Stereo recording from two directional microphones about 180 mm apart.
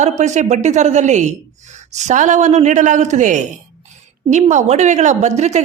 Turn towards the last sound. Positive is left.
turn(degrees=-40)  # may be behind; listen again after turning